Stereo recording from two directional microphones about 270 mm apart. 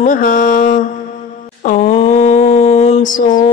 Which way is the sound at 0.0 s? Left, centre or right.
Left.